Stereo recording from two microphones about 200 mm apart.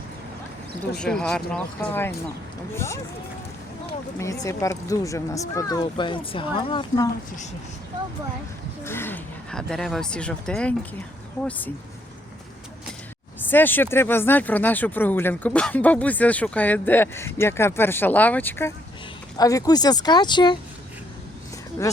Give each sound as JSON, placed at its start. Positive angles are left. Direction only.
{"t": 0.8, "sound": "speech", "side_deg": 5}
{"t": 4.2, "sound": "speech", "side_deg": 15}
{"t": 8.8, "sound": "speech", "side_deg": 10}
{"t": 13.5, "sound": "speech", "side_deg": 10}